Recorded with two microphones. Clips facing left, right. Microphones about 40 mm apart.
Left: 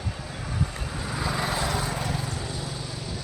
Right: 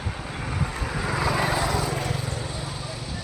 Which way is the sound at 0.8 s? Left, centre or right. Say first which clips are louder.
Right 5 dB; right.